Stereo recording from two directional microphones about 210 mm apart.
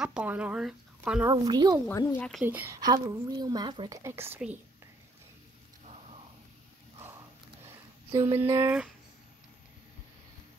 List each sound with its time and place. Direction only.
0.0 s speech: 5° right (ahead or behind)
1.3 s a woman's voice: 20° right (ahead or behind)
1.9 s speech: 10° left (ahead or behind)
2.4 s a woman's voice: 10° right (ahead or behind)
7.6 s a sound: 10° right (ahead or behind)